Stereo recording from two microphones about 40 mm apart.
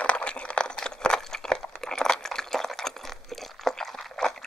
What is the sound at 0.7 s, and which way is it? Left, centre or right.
Crunch, centre.